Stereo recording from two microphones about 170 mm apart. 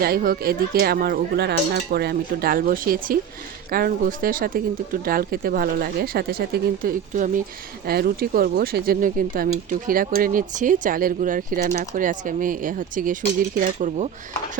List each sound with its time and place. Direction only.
0.0 s speech: 60° right (ahead or behind)